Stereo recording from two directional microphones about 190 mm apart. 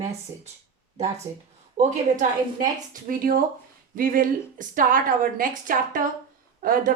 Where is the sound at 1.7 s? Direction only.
40° right (ahead or behind).